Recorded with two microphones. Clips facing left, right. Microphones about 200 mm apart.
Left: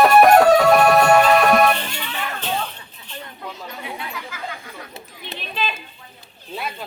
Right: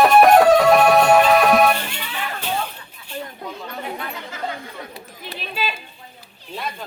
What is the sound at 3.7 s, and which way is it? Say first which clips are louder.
Chatter: right 3 dB; 50° right (ahead or behind).